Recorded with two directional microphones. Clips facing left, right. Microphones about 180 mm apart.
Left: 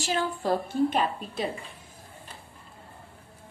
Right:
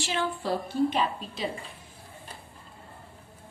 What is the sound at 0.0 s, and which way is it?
A woman's voice, 40° left (ahead or behind).